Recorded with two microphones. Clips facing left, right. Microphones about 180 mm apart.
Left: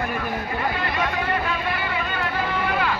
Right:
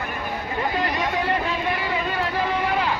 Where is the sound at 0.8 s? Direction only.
40° right (ahead or behind).